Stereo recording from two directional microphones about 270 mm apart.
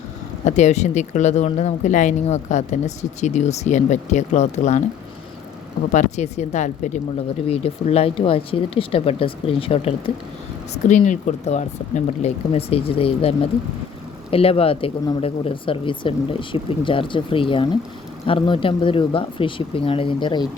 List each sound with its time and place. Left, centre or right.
0.4 s speech: left
5.9 s speech: left